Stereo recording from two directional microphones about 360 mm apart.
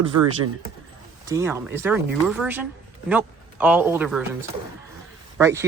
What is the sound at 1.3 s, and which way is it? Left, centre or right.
Speech, centre.